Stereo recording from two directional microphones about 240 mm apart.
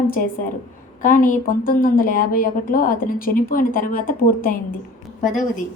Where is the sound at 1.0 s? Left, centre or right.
Left.